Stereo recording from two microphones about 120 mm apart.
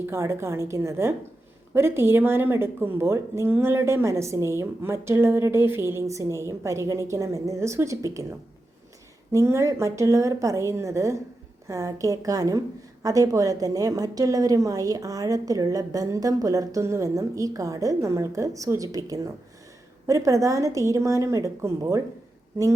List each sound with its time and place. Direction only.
0.0 s a woman's voice: 20° right (ahead or behind)
9.3 s a woman's voice: 25° right (ahead or behind)